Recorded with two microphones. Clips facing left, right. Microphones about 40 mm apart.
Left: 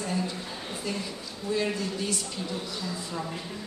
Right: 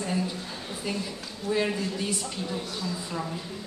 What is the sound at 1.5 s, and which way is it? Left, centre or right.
A woman's voice, centre.